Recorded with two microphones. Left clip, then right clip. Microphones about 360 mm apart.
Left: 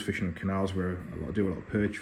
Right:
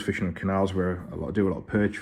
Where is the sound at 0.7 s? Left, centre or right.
Right.